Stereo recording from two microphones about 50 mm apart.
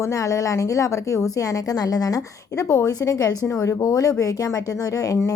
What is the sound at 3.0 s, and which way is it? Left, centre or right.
Speech, left.